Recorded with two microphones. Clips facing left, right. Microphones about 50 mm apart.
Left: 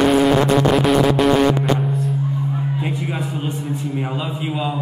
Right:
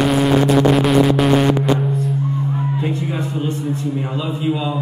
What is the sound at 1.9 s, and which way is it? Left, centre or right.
Music, centre.